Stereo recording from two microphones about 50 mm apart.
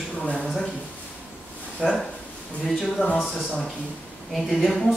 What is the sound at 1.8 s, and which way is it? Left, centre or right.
Speech, left.